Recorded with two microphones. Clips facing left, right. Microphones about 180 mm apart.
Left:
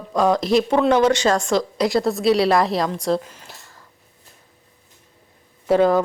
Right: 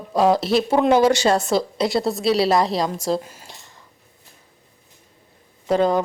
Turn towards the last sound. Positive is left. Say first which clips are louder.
# left 2 dB
turn(degrees=5)  # may be behind; listen again after turning